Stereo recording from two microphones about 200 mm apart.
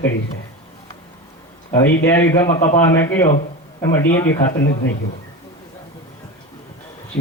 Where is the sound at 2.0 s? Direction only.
10° left (ahead or behind).